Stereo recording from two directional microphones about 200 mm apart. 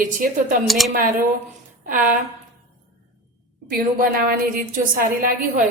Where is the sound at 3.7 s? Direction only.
45° right (ahead or behind).